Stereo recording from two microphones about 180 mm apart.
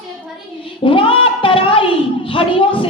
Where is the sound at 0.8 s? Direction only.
30° left (ahead or behind).